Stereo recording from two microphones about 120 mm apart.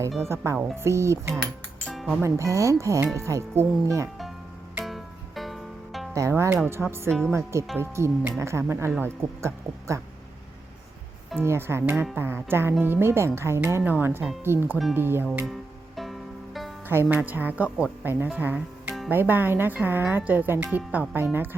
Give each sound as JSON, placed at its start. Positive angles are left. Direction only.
{"t": 0.4, "sound": "speech", "side_deg": -25}
{"t": 4.8, "sound": "music", "side_deg": 0}
{"t": 6.1, "sound": "speech", "side_deg": -25}
{"t": 7.1, "sound": "speech", "side_deg": 5}
{"t": 7.8, "sound": "speech", "side_deg": -20}
{"t": 11.3, "sound": "speech", "side_deg": -20}
{"t": 16.9, "sound": "speech", "side_deg": -20}